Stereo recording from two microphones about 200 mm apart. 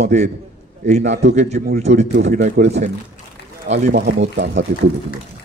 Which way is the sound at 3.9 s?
60° right (ahead or behind).